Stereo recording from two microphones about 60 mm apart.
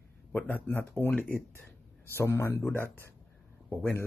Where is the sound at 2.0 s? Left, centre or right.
Left.